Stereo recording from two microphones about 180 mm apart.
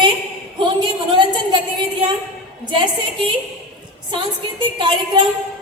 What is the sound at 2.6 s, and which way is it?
Speech, 25° right (ahead or behind).